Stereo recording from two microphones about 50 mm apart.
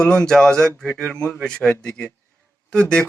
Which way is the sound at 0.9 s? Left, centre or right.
Left.